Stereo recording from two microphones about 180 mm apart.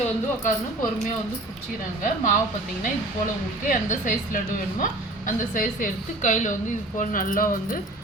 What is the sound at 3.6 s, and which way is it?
A woman's voice, 50° left (ahead or behind).